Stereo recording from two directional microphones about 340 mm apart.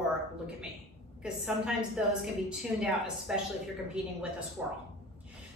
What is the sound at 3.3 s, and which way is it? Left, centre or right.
Speech, centre.